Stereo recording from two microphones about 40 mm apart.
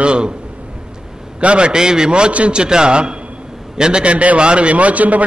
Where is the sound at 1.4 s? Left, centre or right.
Right.